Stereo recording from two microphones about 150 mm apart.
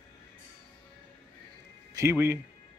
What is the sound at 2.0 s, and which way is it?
Speech, 20° right (ahead or behind).